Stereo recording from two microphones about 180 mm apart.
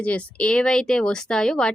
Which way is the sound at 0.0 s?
5° left (ahead or behind).